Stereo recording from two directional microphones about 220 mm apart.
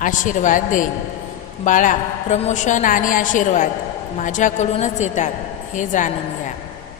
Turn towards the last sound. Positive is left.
turn(degrees=35)  # may be behind; listen again after turning